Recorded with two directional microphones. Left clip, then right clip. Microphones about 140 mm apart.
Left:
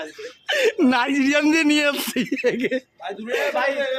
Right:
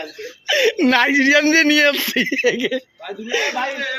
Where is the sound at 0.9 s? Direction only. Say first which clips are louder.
Right 6 dB; centre (ahead or behind).